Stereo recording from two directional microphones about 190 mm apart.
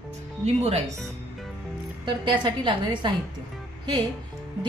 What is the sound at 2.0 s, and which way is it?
A woman's voice, 25° right (ahead or behind).